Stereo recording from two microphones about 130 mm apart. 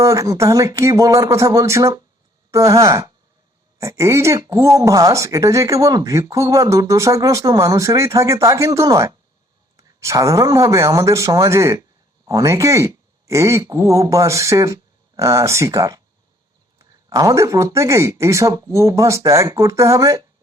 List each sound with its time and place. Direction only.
0.0 s speech: 25° right (ahead or behind)